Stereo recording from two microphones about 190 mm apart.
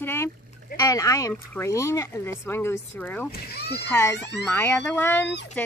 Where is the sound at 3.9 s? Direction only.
15° left (ahead or behind).